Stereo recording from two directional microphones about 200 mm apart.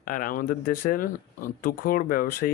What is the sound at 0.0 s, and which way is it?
Speech, 45° left (ahead or behind).